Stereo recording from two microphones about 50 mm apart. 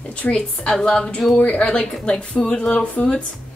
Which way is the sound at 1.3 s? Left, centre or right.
Left.